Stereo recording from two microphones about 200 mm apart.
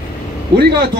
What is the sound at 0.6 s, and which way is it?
Speech, 50° right (ahead or behind).